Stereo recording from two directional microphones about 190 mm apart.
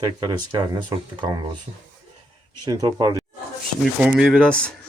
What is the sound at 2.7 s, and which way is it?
Speech, 20° right (ahead or behind).